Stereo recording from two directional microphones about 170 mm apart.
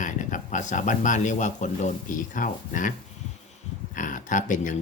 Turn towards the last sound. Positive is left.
turn(degrees=45)  # may be behind; listen again after turning